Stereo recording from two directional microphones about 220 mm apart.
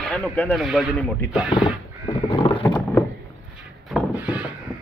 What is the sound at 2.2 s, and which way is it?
Crow, 20° left (ahead or behind).